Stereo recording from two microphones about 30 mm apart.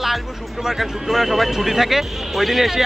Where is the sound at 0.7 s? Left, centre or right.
Centre.